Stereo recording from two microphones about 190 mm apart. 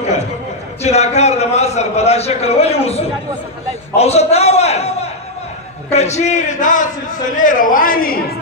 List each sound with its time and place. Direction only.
0.8 s a man's voice: 35° left (ahead or behind)
3.9 s a sound: 35° left (ahead or behind)
5.9 s a man's voice: 35° left (ahead or behind)